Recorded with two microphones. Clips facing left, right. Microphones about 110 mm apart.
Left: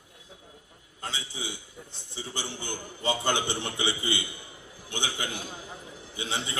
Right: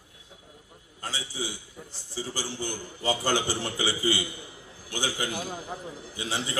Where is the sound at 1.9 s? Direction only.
25° left (ahead or behind).